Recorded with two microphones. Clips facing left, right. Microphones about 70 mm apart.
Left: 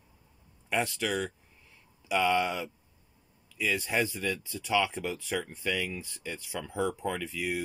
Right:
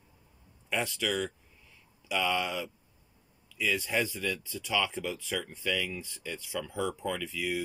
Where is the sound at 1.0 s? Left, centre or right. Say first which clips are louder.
Even; centre.